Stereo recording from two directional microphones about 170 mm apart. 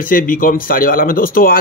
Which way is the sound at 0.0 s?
55° left (ahead or behind).